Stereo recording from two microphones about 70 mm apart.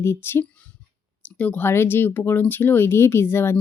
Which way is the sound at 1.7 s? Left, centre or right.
Left.